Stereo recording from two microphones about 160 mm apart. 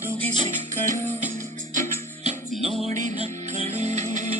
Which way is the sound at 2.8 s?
45° right (ahead or behind).